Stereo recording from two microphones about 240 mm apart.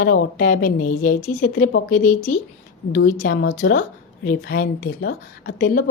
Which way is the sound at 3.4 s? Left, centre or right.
Left.